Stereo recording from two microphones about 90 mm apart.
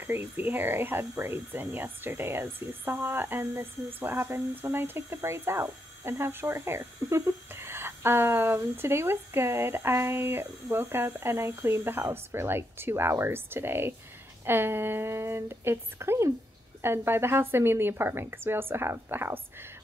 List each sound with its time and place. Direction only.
0.0 s speech: 25° right (ahead or behind)